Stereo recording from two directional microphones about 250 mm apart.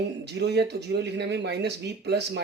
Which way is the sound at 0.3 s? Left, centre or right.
Right.